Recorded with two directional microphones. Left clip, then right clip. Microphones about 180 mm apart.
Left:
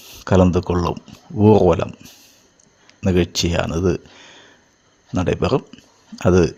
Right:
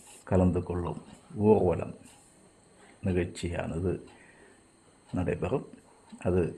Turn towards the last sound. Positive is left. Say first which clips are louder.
# left 13 dB
turn(degrees=40)  # may be behind; listen again after turning